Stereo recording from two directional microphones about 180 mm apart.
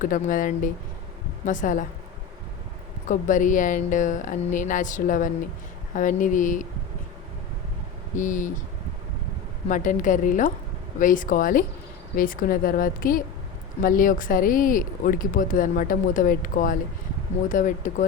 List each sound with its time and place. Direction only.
0.0 s speech: 50° left (ahead or behind)
3.1 s speech: 45° left (ahead or behind)
8.1 s speech: 45° left (ahead or behind)
9.6 s speech: 45° left (ahead or behind)